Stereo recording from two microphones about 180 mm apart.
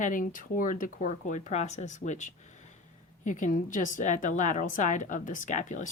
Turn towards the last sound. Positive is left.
turn(degrees=45)  # may be behind; listen again after turning